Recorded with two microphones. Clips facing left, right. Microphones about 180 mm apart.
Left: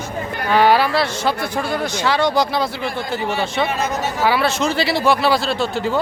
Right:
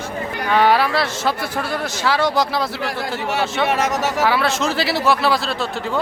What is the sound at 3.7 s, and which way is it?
Speech, 85° right.